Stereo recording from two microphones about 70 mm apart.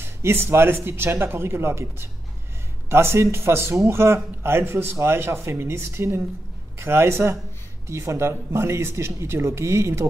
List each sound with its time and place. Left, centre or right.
0.0 s a man's voice: right